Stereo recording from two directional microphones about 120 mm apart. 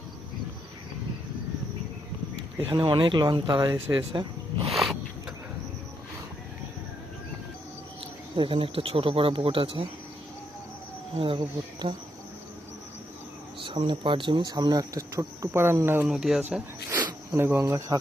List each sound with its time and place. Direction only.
2.6 s speech: 40° right (ahead or behind)
4.7 s a sound: centre (ahead or behind)
8.4 s speech: 45° right (ahead or behind)
11.3 s speech: 40° right (ahead or behind)
13.6 s speech: 45° right (ahead or behind); by 16.0 s 15° right (ahead or behind)
16.0 s speech: 5° right (ahead or behind); by 18.0 s 25° right (ahead or behind)